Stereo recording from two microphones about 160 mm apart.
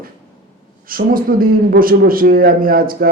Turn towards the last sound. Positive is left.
turn(degrees=-65)  # may be behind; listen again after turning